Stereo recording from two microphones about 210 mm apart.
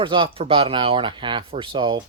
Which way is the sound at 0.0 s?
25° right (ahead or behind).